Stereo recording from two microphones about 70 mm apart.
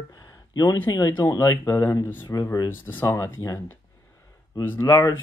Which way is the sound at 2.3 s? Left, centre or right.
Left.